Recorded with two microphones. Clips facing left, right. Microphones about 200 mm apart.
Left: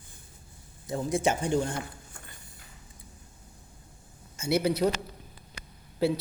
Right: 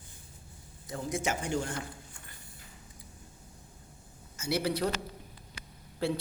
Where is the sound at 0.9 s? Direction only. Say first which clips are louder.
Left 6 dB; 30° left (ahead or behind).